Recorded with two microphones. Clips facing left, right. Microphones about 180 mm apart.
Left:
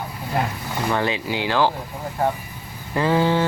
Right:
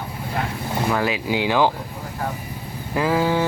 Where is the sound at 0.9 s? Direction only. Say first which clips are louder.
Even; 5° right (ahead or behind).